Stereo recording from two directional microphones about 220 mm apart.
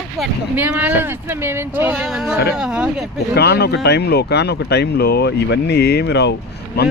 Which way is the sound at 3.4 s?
45° left (ahead or behind).